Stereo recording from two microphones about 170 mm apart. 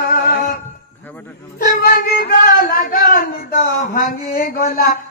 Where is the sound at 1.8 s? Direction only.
60° left (ahead or behind).